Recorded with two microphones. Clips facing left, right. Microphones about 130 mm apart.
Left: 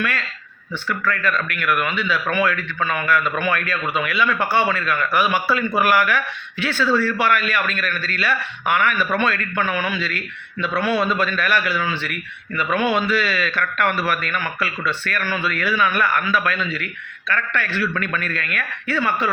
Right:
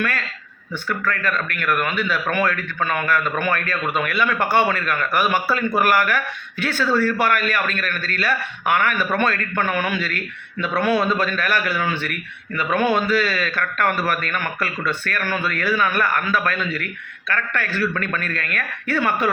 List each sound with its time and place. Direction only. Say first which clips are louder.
0.9 s a man's voice: left 1 dB; 45° right (ahead or behind)